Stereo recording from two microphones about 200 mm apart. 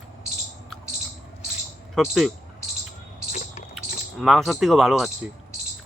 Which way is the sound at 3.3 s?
35° left (ahead or behind).